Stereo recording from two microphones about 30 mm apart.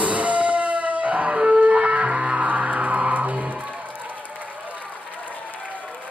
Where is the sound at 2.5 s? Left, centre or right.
Right.